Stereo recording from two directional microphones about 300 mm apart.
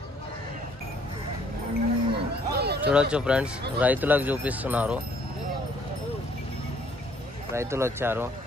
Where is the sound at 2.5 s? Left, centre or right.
Right.